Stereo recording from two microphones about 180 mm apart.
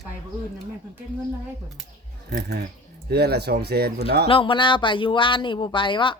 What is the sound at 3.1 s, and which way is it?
Speech, 65° right (ahead or behind).